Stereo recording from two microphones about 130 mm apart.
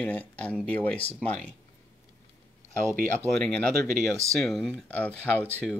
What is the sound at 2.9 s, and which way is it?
Speech, 80° right.